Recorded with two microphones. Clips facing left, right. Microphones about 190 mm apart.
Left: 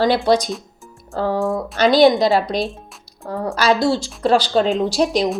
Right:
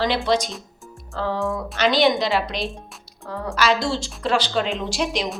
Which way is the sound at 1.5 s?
35° left (ahead or behind).